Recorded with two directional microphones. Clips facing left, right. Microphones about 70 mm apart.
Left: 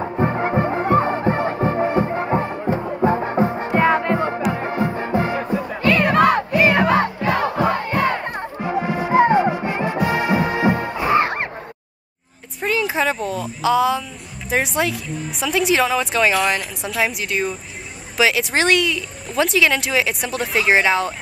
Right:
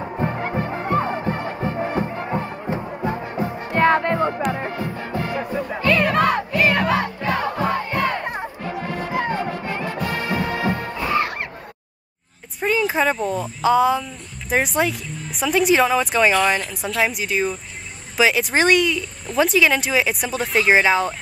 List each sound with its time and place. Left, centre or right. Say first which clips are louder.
0.2 s music: left 5 dB; left
3.0 s music: left 10 dB; left
3.7 s music: right 1 dB; centre
4.6 s music: left 5 dB; left
5.5 s music: right 1 dB; centre
6.0 s crowd: left 3 dB; centre
8.5 s music: left 5 dB; centre
12.6 s a sound: right 1 dB; centre
14.5 s speech: even; centre